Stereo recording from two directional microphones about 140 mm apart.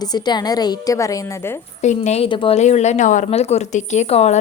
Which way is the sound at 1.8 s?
55° left (ahead or behind).